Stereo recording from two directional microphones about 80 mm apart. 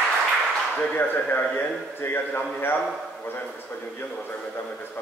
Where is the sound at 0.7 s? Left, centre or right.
Left.